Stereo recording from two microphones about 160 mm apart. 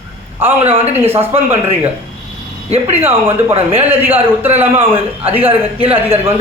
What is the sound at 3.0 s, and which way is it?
A man's voice, 15° right (ahead or behind).